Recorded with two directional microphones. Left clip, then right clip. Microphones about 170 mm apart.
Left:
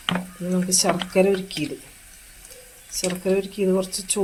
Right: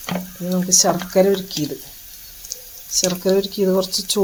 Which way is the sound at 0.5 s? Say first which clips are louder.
Right 5 dB; 15° right (ahead or behind).